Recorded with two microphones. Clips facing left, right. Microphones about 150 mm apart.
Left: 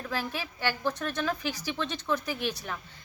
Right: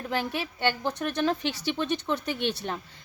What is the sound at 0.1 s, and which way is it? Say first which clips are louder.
A woman's voice: right 5 dB; 20° right (ahead or behind).